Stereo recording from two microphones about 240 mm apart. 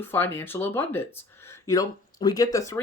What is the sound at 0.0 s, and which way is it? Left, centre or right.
Speech, centre.